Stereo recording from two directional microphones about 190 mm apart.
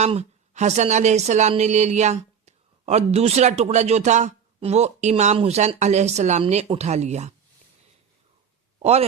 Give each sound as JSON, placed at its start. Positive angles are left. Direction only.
{"t": 0.0, "sound": "speech", "side_deg": -35}
{"t": 8.8, "sound": "speech", "side_deg": -35}